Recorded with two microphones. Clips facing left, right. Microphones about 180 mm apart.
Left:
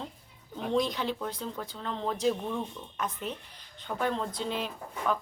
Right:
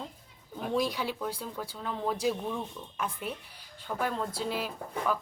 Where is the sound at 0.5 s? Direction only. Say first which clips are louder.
Left 1 dB; 5° right (ahead or behind).